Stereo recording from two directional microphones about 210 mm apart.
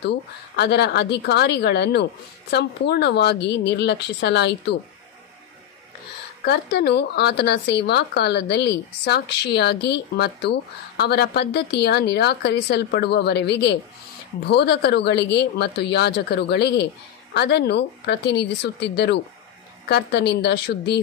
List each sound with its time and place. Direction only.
0.0 s speech: 55° left (ahead or behind)
6.4 s speech: 50° left (ahead or behind)